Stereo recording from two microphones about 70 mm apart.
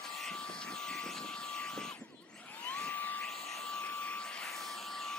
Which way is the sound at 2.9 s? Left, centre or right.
Left.